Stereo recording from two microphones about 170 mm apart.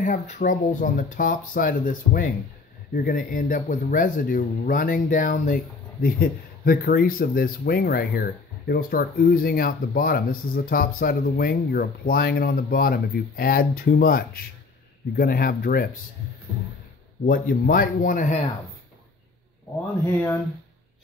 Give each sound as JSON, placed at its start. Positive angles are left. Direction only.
{"t": 0.0, "sound": "speech", "side_deg": 50}
{"t": 17.2, "sound": "speech", "side_deg": 60}